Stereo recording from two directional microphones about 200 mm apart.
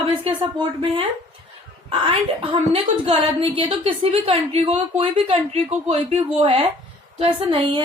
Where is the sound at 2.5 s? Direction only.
25° right (ahead or behind).